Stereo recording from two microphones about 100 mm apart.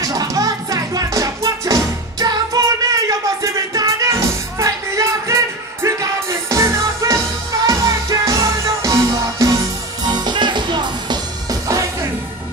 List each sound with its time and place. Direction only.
0.0 s music: 35° right (ahead or behind)
10.0 s music: 45° right (ahead or behind)